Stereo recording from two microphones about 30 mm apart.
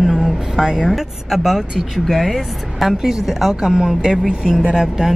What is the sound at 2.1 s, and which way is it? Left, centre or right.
Speech, centre.